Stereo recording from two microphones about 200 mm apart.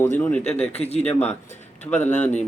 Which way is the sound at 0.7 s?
30° left (ahead or behind).